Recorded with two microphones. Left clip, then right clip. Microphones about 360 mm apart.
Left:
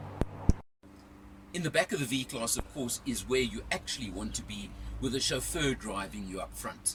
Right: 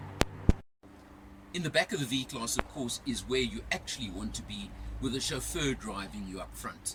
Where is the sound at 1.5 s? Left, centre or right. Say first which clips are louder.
Even; centre.